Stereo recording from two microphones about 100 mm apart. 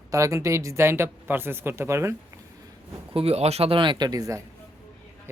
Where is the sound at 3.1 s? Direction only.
75° right (ahead or behind); by 4.4 s 35° right (ahead or behind).